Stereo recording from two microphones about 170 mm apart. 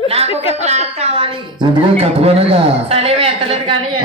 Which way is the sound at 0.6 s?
40° right (ahead or behind).